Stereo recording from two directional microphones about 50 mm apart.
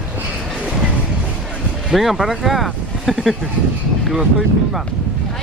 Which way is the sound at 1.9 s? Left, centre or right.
Centre.